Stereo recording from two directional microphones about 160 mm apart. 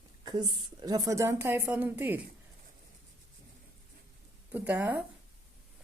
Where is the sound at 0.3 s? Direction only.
25° right (ahead or behind); by 2.2 s 10° right (ahead or behind).